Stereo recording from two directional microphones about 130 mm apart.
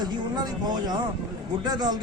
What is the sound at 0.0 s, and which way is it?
A man's voice, 30° right (ahead or behind).